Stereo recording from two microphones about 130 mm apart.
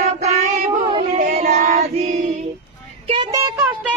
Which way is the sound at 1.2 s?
75° right (ahead or behind).